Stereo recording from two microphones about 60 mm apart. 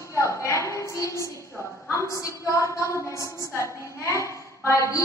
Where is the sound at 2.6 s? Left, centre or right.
Left.